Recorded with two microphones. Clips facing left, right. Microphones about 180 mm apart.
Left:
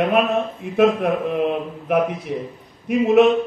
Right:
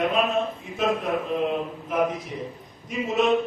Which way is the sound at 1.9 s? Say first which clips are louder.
Left 6 dB; 60° left (ahead or behind).